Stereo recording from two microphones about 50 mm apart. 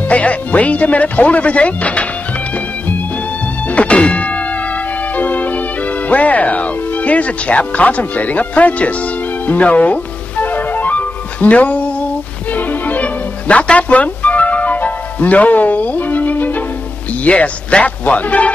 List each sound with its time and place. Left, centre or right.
0.1 s speech: left
3.6 s music: left
9.5 s speech: left
10.4 s music: left
17.2 s speech: left